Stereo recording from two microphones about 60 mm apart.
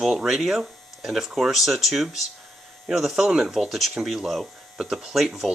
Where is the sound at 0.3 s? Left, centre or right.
Centre.